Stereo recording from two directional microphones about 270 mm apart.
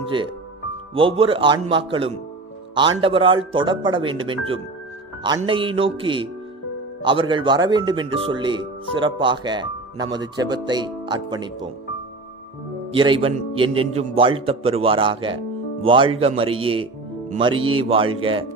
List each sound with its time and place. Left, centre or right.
0.9 s a man's voice: centre
12.9 s a man's voice: centre